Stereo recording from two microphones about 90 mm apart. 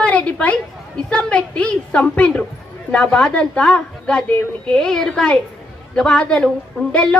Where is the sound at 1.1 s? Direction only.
15° left (ahead or behind).